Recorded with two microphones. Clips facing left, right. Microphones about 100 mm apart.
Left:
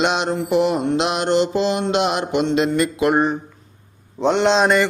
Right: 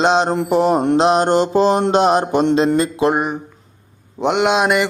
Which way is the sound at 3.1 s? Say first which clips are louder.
Left 2 dB; 10° right (ahead or behind).